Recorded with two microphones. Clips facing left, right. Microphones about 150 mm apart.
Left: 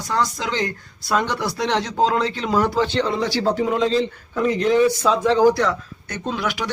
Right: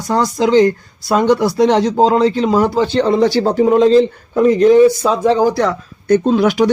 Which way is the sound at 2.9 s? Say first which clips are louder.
Right 9 dB; 45° right (ahead or behind).